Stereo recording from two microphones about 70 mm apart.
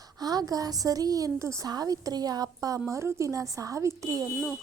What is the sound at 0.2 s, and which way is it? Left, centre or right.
A woman's voice, right.